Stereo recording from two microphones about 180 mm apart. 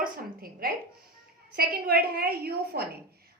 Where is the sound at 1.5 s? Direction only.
55° right (ahead or behind).